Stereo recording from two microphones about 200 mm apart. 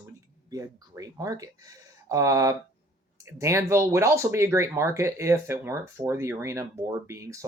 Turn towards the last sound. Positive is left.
turn(degrees=-15)  # may be behind; listen again after turning